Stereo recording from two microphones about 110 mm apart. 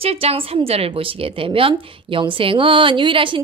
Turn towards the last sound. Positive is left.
turn(degrees=-50)  # may be behind; listen again after turning